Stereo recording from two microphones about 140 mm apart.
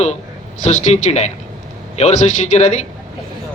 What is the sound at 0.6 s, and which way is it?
A man's voice, 55° left (ahead or behind).